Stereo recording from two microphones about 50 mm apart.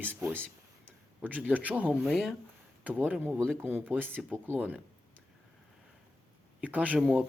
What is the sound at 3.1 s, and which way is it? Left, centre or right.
Speech, right.